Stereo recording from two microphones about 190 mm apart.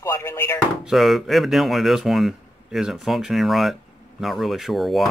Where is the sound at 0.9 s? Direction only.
Centre (ahead or behind).